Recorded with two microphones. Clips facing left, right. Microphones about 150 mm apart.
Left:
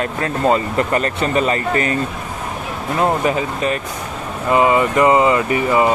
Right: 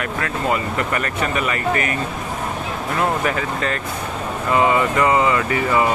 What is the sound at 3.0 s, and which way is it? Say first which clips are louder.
Speech: left 4 dB; 20° left (ahead or behind).